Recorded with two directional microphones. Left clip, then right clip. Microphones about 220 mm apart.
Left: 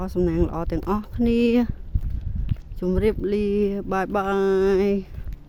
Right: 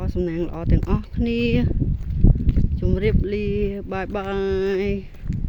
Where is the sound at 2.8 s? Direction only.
15° left (ahead or behind).